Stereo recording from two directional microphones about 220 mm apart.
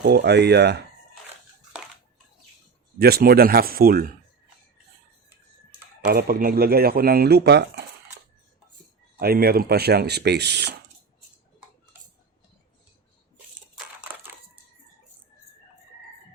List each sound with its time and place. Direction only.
0.0 s speech: 50° right (ahead or behind)
3.0 s speech: 45° right (ahead or behind)
6.1 s speech: 45° right (ahead or behind)
9.1 s speech: 45° right (ahead or behind)